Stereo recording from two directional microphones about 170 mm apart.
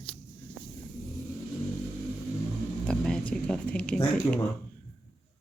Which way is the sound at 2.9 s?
5° left (ahead or behind).